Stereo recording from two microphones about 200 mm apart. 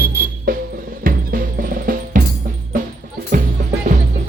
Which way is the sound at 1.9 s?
45° right (ahead or behind).